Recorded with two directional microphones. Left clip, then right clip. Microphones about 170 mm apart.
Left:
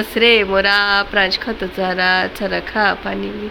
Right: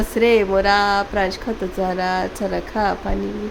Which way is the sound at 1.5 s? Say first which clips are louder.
Left 2 dB; 5° left (ahead or behind).